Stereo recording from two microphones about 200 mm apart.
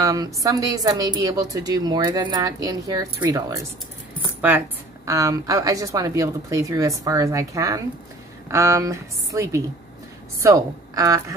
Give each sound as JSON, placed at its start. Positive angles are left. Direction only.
{"t": 0.0, "sound": "a woman's voice", "side_deg": -20}